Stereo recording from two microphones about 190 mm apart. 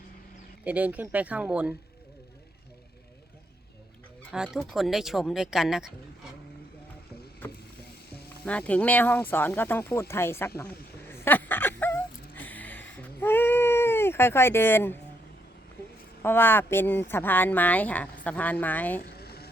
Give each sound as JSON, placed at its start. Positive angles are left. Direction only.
{"t": 0.6, "sound": "speech", "side_deg": -5}
{"t": 4.3, "sound": "speech", "side_deg": -5}
{"t": 8.4, "sound": "speech", "side_deg": 5}
{"t": 11.1, "sound": "a sound", "side_deg": 10}
{"t": 16.2, "sound": "speech", "side_deg": 10}
{"t": 19.0, "sound": "vehicle", "side_deg": 55}